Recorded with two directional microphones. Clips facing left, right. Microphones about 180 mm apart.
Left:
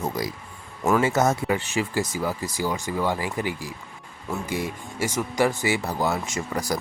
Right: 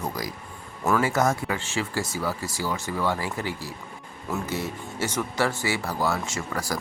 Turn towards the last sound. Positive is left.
turn(degrees=20)  # may be behind; listen again after turning